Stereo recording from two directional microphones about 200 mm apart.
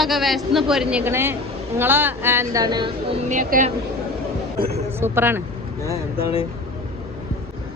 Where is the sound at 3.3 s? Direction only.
40° right (ahead or behind).